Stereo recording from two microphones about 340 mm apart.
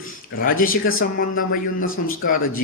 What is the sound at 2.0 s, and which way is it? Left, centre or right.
Speech, left.